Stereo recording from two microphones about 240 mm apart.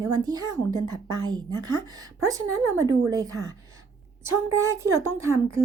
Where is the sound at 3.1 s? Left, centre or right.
Centre.